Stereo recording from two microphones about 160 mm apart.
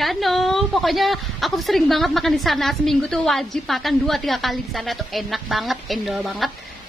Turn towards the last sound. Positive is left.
turn(degrees=-5)  # may be behind; listen again after turning